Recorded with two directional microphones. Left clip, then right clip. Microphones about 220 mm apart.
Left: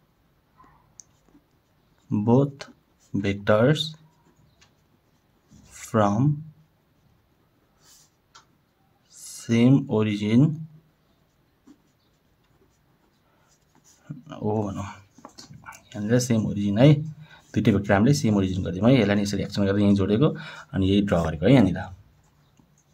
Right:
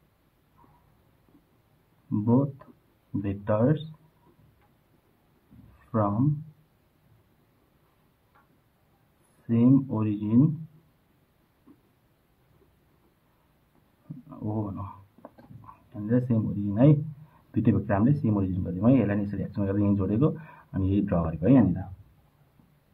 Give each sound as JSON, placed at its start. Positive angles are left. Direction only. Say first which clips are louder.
{"t": 2.2, "sound": "speech", "louder": "left 5 dB", "side_deg": 35}
{"t": 5.9, "sound": "speech", "louder": "left 5 dB", "side_deg": 35}
{"t": 9.5, "sound": "speech", "louder": "left 2 dB", "side_deg": 35}
{"t": 14.3, "sound": "speech", "louder": "left 7 dB", "side_deg": 35}
{"t": 15.9, "sound": "speech", "louder": "left 4 dB", "side_deg": 30}